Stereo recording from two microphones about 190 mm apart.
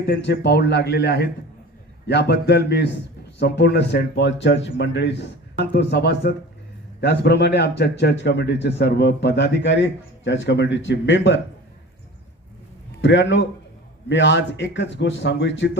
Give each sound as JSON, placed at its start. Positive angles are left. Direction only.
{"t": 0.1, "sound": "a man's voice", "side_deg": 60}
{"t": 13.0, "sound": "a man's voice", "side_deg": 70}